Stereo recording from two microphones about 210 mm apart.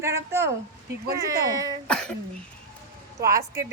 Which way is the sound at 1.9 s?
5° left (ahead or behind).